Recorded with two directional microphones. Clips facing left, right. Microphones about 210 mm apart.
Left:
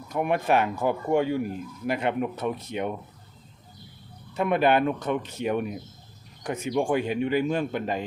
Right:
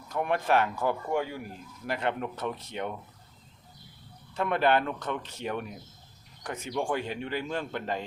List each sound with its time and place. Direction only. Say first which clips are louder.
0.1 s speech: left 3 dB; 15° left (ahead or behind)
4.4 s speech: left 4 dB; 15° left (ahead or behind)